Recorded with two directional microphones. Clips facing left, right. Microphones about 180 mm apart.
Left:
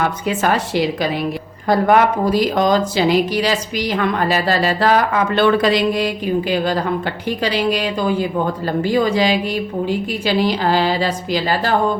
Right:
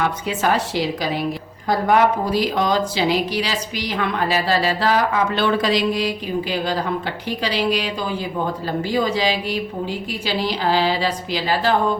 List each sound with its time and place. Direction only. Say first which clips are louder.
0.0 s a woman's voice: left 2 dB; 50° left (ahead or behind)
8.6 s a woman's voice: left 4 dB; 55° left (ahead or behind)